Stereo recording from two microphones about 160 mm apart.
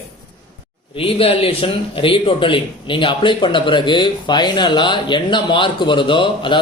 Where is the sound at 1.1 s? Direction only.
35° left (ahead or behind).